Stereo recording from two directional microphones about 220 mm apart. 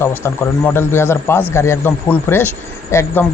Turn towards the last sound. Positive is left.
turn(degrees=10)  # may be behind; listen again after turning